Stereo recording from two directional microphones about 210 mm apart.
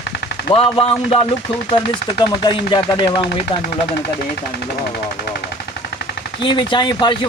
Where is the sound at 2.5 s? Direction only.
20° left (ahead or behind).